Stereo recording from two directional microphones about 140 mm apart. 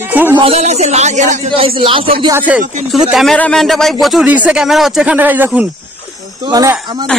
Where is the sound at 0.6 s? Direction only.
50° right (ahead or behind).